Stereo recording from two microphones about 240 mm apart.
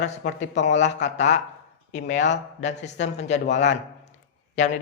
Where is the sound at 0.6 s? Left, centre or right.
Left.